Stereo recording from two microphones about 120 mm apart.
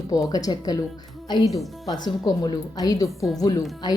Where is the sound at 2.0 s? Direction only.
35° left (ahead or behind).